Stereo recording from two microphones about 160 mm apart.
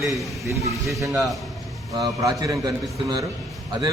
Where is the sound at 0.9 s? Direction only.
20° right (ahead or behind).